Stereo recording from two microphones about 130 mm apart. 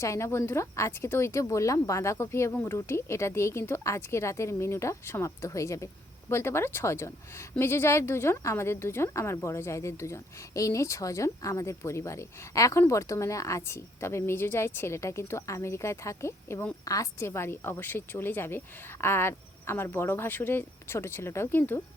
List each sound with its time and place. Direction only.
0.0 s a woman's voice: 20° left (ahead or behind)